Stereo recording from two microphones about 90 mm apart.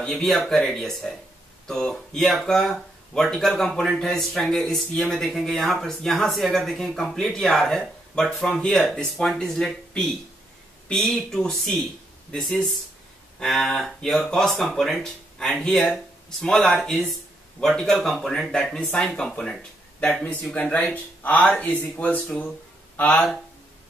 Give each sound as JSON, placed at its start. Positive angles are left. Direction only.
{"t": 0.0, "sound": "speech", "side_deg": 5}